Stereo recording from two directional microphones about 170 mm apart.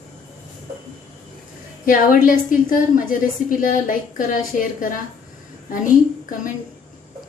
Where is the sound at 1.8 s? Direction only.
50° left (ahead or behind).